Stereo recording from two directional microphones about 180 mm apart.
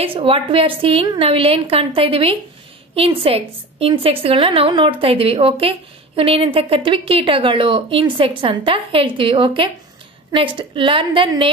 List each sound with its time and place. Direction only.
0.0 s a woman's voice: 30° right (ahead or behind)